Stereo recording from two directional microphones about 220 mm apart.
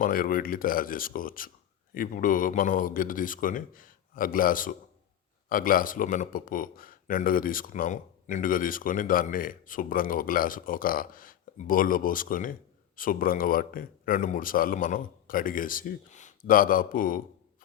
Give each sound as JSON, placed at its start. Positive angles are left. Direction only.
{"t": 0.0, "sound": "speech", "side_deg": 40}